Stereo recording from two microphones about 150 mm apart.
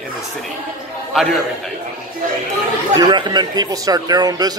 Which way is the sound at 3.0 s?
30° right (ahead or behind).